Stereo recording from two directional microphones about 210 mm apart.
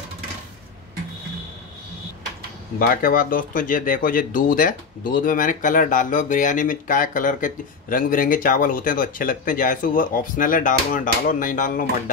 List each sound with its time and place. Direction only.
2.9 s speech: 45° left (ahead or behind)